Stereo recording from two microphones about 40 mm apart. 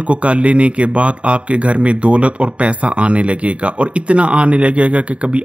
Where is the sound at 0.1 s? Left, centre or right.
Right.